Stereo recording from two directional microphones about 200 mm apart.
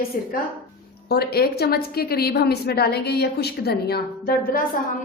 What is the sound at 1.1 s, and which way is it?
A woman's voice, 50° left (ahead or behind).